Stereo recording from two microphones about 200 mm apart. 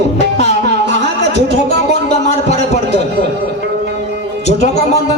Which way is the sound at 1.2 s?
55° right (ahead or behind).